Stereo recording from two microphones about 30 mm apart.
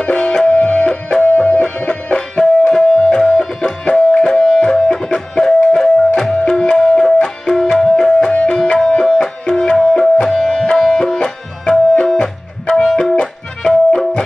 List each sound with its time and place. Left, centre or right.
0.0 s music: left
1.2 s music: left
2.1 s music: left
8.3 s music: left
8.7 s music: left
11.2 s tabla: left
13.0 s music: left